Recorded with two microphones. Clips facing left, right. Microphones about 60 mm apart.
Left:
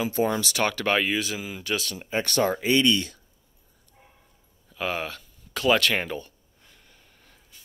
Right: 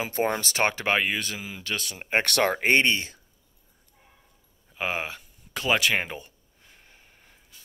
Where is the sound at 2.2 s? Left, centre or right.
Right.